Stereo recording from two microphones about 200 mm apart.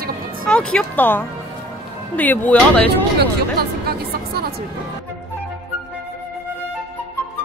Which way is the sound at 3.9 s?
50° right (ahead or behind).